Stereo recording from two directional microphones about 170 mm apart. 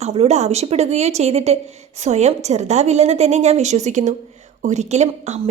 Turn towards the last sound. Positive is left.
turn(degrees=-40)  # may be behind; listen again after turning